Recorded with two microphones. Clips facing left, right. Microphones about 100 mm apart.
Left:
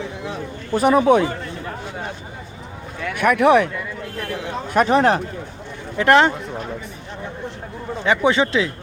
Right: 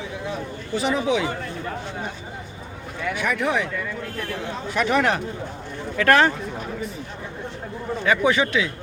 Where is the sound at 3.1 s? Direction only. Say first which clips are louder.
Left 9 dB; 60° left (ahead or behind).